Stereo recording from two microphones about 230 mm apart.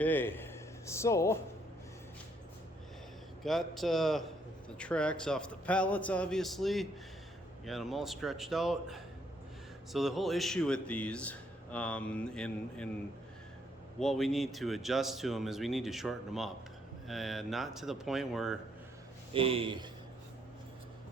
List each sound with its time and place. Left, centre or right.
0.0 s a man's voice: centre
3.4 s speech: centre
14.0 s speech: centre
19.3 s speech: right